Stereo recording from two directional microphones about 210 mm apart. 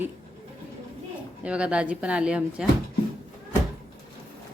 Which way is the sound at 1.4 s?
5° right (ahead or behind).